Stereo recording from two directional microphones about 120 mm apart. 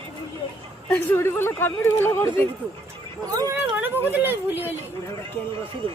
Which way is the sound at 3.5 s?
15° right (ahead or behind).